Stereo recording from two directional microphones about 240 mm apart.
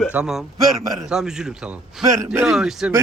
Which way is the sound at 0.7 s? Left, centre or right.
Centre.